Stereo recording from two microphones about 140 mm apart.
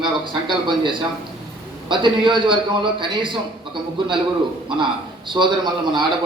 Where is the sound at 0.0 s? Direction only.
35° right (ahead or behind).